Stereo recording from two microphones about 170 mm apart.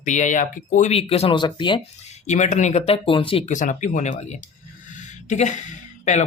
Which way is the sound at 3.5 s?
50° left (ahead or behind).